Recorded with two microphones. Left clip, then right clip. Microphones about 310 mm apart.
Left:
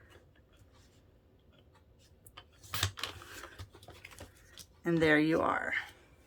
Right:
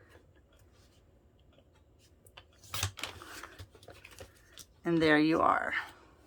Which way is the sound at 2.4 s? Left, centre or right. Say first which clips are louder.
Left 2 dB; centre.